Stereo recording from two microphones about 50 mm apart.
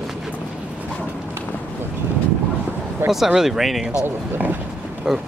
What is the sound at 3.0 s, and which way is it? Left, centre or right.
Speech, right.